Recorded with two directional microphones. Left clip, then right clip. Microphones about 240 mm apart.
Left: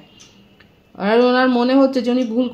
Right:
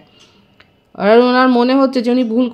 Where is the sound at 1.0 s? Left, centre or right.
Right.